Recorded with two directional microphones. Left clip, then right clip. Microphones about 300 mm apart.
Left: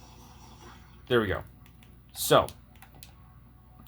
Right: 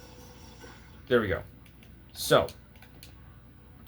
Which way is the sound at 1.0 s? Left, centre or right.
Left.